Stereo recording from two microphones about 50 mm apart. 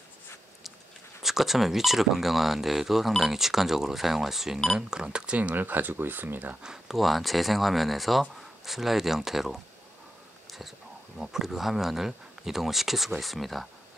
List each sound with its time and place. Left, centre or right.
1.2 s speech: centre; by 6.6 s right
6.6 s speech: centre
7.0 s speech: centre
11.1 s speech: centre